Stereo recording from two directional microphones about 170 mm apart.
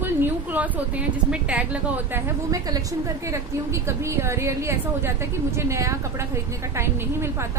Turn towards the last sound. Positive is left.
turn(degrees=-15)  # may be behind; listen again after turning